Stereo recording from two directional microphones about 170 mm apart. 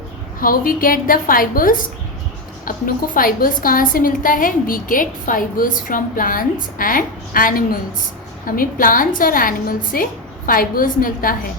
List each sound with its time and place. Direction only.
0.3 s a woman's voice: 55° left (ahead or behind)